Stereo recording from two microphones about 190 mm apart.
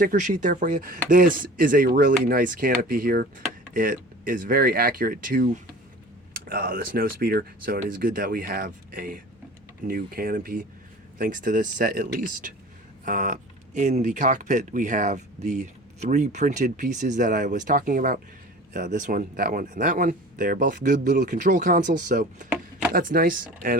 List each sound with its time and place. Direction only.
0.0 s speech: 45° right (ahead or behind)